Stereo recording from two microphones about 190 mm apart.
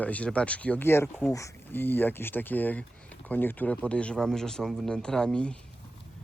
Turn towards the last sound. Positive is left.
turn(degrees=5)  # may be behind; listen again after turning